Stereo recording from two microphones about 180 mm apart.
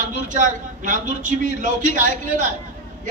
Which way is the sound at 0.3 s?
45° right (ahead or behind).